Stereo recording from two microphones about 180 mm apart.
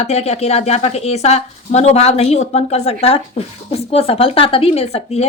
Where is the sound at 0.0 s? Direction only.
35° left (ahead or behind).